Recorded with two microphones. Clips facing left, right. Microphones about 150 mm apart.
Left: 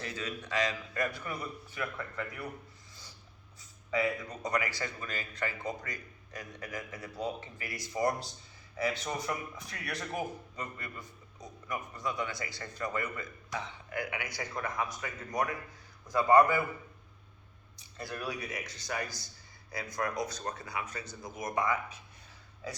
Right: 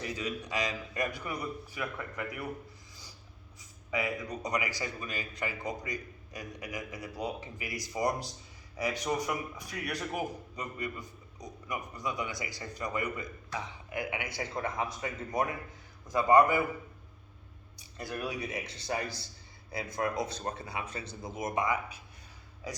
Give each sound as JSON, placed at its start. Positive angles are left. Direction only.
{"t": 0.0, "sound": "a man's voice", "side_deg": -15}
{"t": 3.6, "sound": "a man's voice", "side_deg": -15}
{"t": 8.8, "sound": "a man's voice", "side_deg": -15}
{"t": 17.7, "sound": "a man's voice", "side_deg": -15}